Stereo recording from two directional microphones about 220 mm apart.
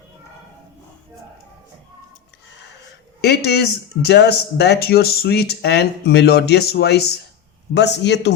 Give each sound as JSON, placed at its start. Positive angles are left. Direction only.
{"t": 3.2, "sound": "speech", "side_deg": 50}